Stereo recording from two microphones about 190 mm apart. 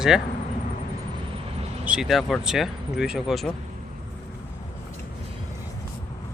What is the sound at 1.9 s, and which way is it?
Speech, 5° right (ahead or behind).